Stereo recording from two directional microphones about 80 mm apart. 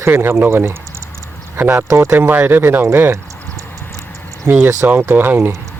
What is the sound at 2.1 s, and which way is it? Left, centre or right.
Speech, right.